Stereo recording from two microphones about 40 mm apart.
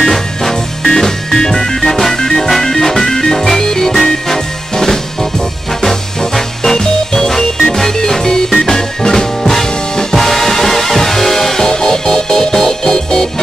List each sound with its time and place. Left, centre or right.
0.0 s music: centre